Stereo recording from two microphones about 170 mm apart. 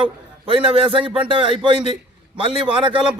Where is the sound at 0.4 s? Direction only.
30° right (ahead or behind).